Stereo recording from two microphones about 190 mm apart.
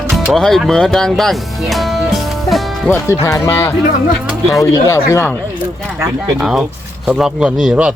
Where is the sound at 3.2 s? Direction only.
15° left (ahead or behind).